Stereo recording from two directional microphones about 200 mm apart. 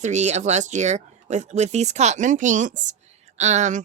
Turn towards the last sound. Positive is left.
turn(degrees=-35)  # may be behind; listen again after turning